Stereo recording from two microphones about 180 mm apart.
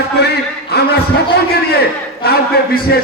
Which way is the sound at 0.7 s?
65° left (ahead or behind).